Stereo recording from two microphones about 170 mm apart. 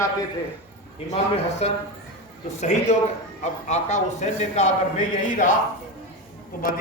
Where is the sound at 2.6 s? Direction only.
45° left (ahead or behind).